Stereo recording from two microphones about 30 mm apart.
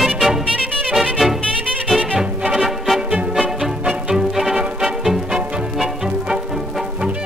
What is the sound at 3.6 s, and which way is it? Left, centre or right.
Music, centre.